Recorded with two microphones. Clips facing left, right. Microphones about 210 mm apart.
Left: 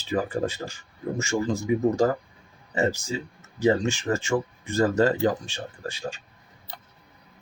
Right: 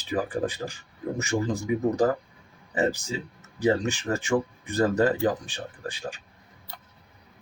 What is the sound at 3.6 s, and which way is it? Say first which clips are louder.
Speech: left 2 dB; 15° right (ahead or behind).